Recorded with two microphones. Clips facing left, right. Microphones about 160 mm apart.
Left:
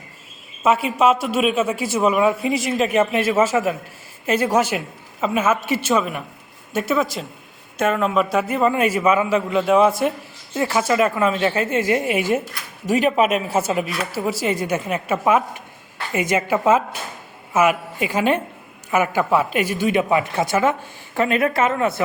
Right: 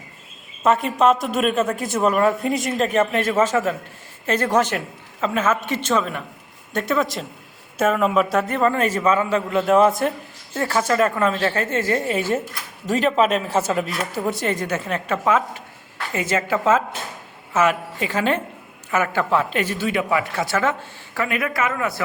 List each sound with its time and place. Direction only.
0.6 s speech: 5° left (ahead or behind)
21.2 s speech: 25° left (ahead or behind)